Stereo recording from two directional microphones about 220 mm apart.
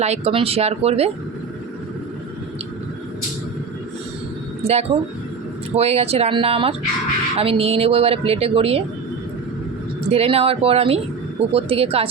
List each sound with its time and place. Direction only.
0.0 s a woman's voice: 30° right (ahead or behind)
4.6 s a woman's voice: 30° right (ahead or behind)
10.1 s a woman's voice: 25° right (ahead or behind)